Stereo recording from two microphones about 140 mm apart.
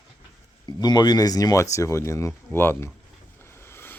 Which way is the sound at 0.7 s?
30° left (ahead or behind).